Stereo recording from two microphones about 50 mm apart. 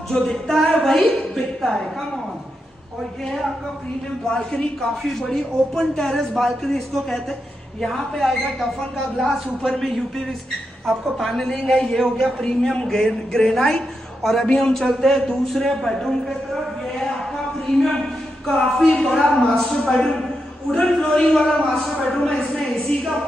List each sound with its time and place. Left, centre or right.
0.1 s a woman's voice: centre
3.3 s a woman's voice: centre
4.3 s a man's voice: centre
17.0 s a sound: centre
18.5 s a man's voice: centre